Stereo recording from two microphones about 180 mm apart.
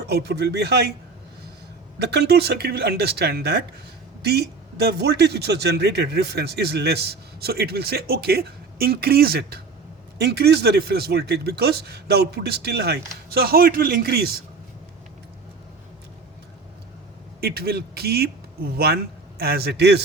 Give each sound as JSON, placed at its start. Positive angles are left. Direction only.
{"t": 0.1, "sound": "speech", "side_deg": -65}
{"t": 2.0, "sound": "speech", "side_deg": -65}
{"t": 17.4, "sound": "a man's voice", "side_deg": -60}